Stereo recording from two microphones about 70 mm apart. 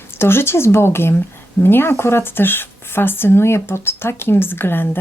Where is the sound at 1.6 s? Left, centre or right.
Left.